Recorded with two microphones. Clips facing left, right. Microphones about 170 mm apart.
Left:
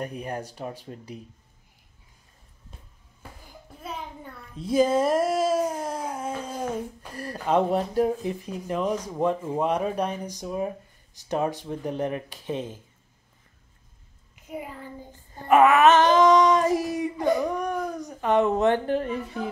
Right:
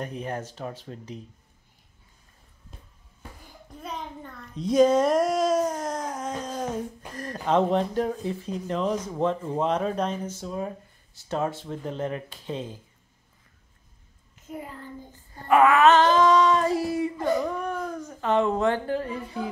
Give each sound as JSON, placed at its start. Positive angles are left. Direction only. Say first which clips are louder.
{"t": 0.0, "sound": "speech", "louder": "even", "side_deg": 10}
{"t": 3.8, "sound": "babbling", "louder": "even", "side_deg": 5}
{"t": 7.2, "sound": "speech", "louder": "even", "side_deg": 10}
{"t": 15.3, "sound": "a sound", "louder": "left 1 dB", "side_deg": 20}